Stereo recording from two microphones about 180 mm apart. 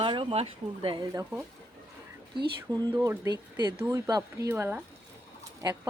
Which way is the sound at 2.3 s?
25° right (ahead or behind).